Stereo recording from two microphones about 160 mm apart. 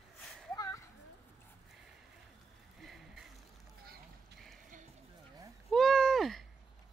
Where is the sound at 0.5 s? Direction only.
20° left (ahead or behind).